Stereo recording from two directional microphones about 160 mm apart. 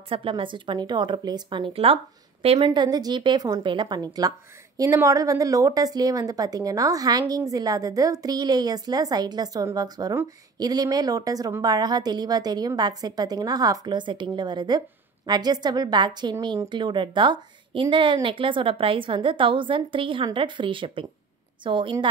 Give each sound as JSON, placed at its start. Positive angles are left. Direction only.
{"t": 0.1, "sound": "a woman's voice", "side_deg": -35}